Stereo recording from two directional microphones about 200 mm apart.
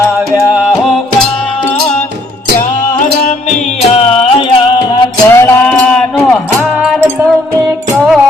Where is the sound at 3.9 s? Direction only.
30° left (ahead or behind).